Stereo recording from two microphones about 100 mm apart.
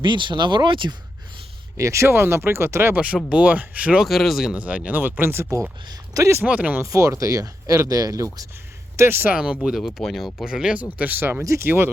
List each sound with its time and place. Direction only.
0.0 s speech: 50° right (ahead or behind)
1.7 s speech: 30° right (ahead or behind)
2.9 s speech: 15° right (ahead or behind)
4.0 s speech: centre (ahead or behind)
4.5 s speech: 15° right (ahead or behind); by 6.4 s 35° right (ahead or behind)
6.4 s speech: 15° right (ahead or behind)
6.8 s speech: 30° right (ahead or behind)
9.0 s speech: 20° right (ahead or behind)
9.3 s speech: 10° right (ahead or behind)